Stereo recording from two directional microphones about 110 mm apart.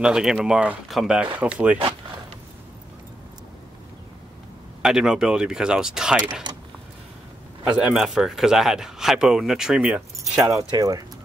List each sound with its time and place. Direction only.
0.0 s speech: 5° right (ahead or behind)
4.8 s speech: 5° right (ahead or behind)
6.5 s a sound: 45° right (ahead or behind)
7.7 s speech: 10° right (ahead or behind)
10.4 s speech: 35° right (ahead or behind)